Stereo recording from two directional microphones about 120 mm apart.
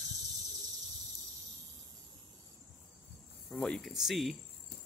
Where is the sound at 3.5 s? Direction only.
5° left (ahead or behind).